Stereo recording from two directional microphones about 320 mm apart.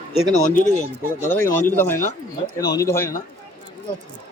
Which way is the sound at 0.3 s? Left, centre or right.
Left.